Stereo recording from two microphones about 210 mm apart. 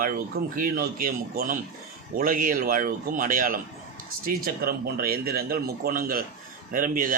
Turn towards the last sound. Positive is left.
turn(degrees=-40)  # may be behind; listen again after turning